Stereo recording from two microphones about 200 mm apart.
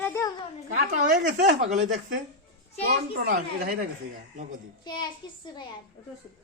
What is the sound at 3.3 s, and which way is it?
Speech, 45° right (ahead or behind).